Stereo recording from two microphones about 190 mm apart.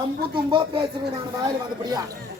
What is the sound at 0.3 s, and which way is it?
Speech, 25° right (ahead or behind).